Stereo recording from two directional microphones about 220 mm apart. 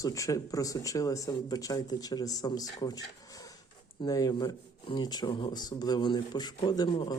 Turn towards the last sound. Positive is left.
turn(degrees=20)  # may be behind; listen again after turning